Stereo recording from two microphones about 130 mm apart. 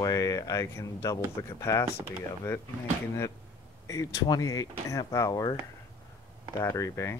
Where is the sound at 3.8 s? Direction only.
25° left (ahead or behind).